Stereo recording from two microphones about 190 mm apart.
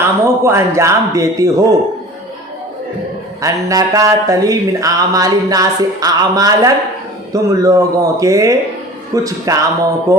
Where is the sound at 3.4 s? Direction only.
15° right (ahead or behind).